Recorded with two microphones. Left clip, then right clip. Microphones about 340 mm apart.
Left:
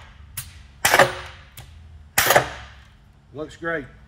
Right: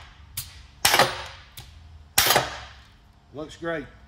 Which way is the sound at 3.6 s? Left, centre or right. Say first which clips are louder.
Left 3 dB; centre.